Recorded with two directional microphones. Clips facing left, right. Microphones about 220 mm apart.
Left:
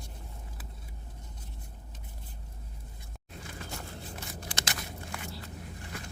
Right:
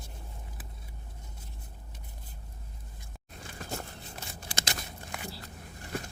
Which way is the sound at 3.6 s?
40° right (ahead or behind).